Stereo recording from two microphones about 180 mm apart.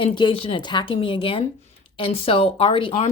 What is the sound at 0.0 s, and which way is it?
Speech, 30° left (ahead or behind).